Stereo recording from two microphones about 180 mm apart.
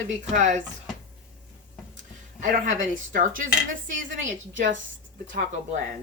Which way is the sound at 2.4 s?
45° right (ahead or behind).